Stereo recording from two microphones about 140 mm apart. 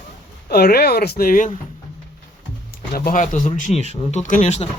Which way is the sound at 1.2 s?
90° left.